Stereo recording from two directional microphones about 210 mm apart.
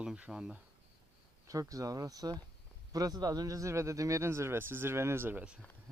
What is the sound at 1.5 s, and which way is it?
Speech, 15° right (ahead or behind).